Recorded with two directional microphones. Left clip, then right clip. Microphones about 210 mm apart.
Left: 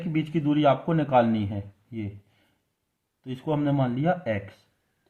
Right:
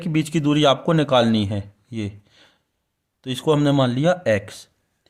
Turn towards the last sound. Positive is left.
turn(degrees=-50)  # may be behind; listen again after turning